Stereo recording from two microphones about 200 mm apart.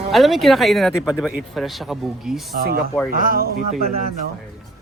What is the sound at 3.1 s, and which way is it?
Speech, 45° right (ahead or behind).